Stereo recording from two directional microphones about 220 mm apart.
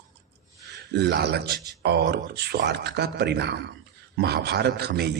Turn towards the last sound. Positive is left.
turn(degrees=-50)  # may be behind; listen again after turning